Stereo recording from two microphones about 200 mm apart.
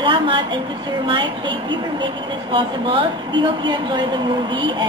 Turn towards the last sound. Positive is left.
turn(degrees=-25)  # may be behind; listen again after turning